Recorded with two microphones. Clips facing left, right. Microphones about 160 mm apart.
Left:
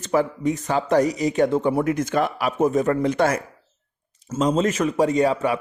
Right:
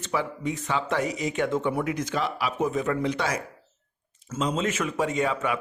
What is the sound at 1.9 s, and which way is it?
Speech, 50° left (ahead or behind).